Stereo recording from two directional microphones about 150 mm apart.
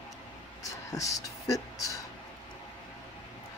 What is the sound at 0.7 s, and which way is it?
Speech, 20° left (ahead or behind).